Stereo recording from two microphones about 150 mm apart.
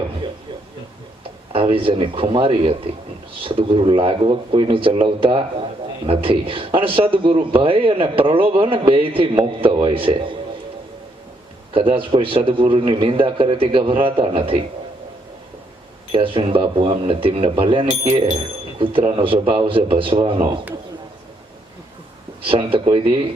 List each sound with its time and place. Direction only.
1.5 s speech: 35° right (ahead or behind)
11.7 s speech: 35° right (ahead or behind)
16.1 s speech: 35° right (ahead or behind)
22.4 s speech: 35° right (ahead or behind)